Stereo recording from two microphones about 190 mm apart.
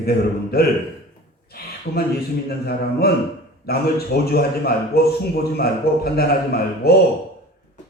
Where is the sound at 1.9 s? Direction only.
50° left (ahead or behind).